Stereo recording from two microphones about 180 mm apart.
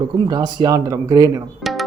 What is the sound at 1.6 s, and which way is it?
Tabla, centre (ahead or behind).